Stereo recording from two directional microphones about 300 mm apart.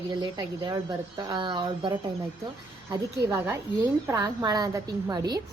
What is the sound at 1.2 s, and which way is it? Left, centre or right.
A woman's voice, centre.